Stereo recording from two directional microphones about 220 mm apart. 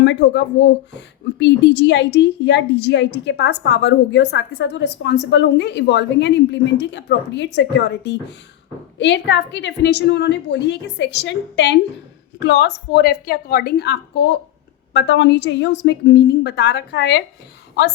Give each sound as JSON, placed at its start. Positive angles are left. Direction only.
{"t": 0.0, "sound": "speech", "side_deg": 50}